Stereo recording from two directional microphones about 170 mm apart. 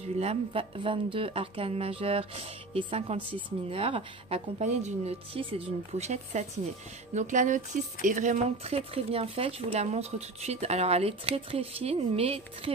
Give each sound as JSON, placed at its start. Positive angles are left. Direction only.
{"t": 0.2, "sound": "speech", "side_deg": -35}